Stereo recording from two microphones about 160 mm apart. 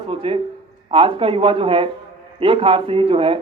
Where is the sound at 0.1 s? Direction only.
35° right (ahead or behind).